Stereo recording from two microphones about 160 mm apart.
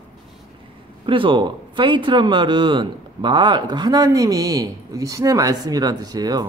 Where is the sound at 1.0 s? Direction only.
30° right (ahead or behind).